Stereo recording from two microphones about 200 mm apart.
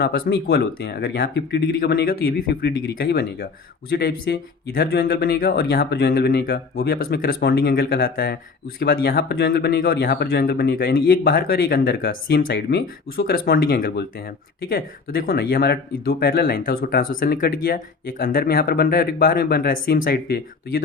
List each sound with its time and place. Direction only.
0.0 s speech: 50° left (ahead or behind)